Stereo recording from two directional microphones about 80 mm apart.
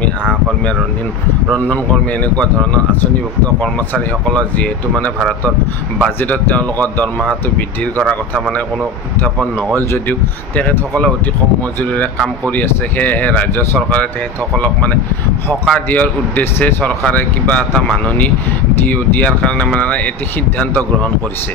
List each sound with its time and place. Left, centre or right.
1.5 s speech: centre
4.6 s speech: centre
6.2 s speech: centre
10.0 s speech: left
18.9 s speech: centre